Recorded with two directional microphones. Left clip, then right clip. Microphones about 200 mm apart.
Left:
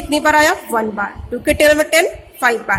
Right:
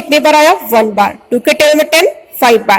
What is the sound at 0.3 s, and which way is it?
Speech, 25° right (ahead or behind).